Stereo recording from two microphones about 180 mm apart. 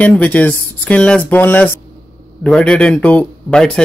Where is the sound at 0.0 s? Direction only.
10° left (ahead or behind).